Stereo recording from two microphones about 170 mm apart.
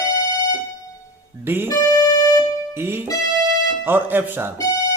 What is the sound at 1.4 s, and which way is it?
Speech, 10° right (ahead or behind).